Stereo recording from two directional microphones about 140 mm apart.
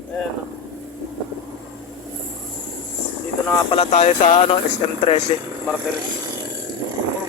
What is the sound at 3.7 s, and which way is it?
Speech, 50° left (ahead or behind).